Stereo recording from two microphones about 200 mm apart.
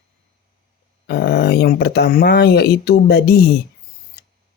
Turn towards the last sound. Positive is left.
turn(degrees=50)  # may be behind; listen again after turning